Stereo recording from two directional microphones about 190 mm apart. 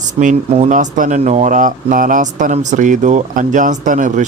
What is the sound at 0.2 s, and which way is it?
Speech, 35° right (ahead or behind).